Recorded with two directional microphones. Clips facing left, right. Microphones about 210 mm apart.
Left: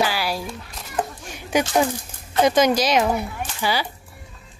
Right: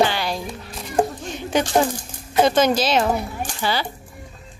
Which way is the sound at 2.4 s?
10° left (ahead or behind).